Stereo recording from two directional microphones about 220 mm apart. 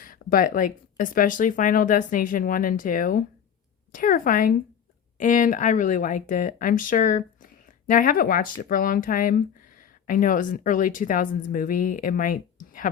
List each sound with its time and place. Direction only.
0.0 s speech: 40° left (ahead or behind)